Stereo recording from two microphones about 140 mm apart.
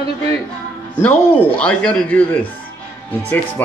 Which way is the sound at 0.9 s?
15° left (ahead or behind).